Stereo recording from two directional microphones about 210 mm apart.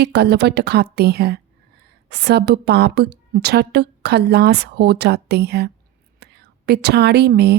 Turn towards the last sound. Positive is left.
turn(degrees=-55)  # may be behind; listen again after turning